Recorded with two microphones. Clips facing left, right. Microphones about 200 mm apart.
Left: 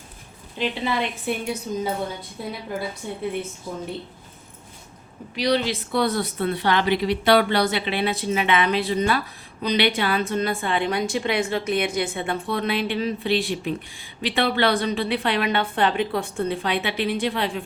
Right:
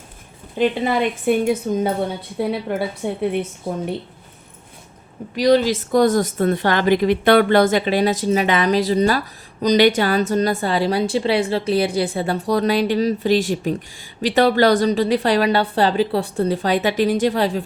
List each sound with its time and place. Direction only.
1.3 s a woman's voice: 50° right (ahead or behind)
2.4 s a woman's voice: 65° right (ahead or behind)
5.3 s speech: 45° right (ahead or behind)